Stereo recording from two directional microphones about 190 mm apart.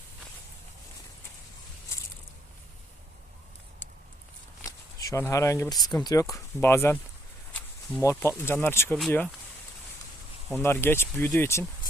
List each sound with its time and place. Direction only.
4.6 s speech: 15° left (ahead or behind)
7.5 s a sound: 5° left (ahead or behind)
8.4 s speech: 10° left (ahead or behind)
10.6 s speech: 10° left (ahead or behind)